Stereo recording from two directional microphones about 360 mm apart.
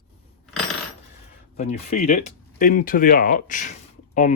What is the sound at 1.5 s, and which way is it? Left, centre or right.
Speech, centre.